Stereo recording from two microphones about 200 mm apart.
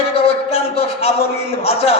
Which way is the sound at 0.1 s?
30° left (ahead or behind).